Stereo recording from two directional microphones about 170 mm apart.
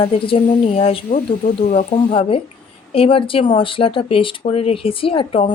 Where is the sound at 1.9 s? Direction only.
35° left (ahead or behind).